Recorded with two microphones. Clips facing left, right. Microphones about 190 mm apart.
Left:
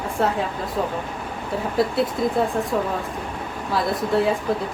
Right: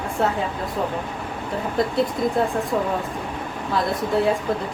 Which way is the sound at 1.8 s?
5° left (ahead or behind).